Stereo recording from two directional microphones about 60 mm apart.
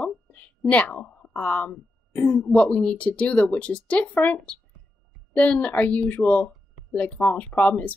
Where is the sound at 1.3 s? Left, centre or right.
Left.